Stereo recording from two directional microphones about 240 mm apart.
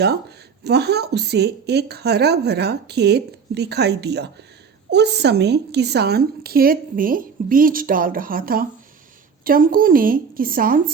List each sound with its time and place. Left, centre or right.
0.0 s a woman's voice: right